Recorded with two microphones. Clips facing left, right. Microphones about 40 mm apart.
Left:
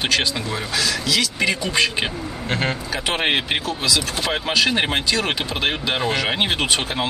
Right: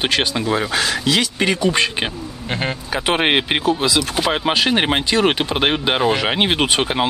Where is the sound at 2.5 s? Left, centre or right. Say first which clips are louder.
Even; centre.